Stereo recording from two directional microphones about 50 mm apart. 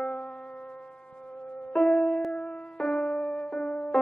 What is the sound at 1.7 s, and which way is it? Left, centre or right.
Music, centre.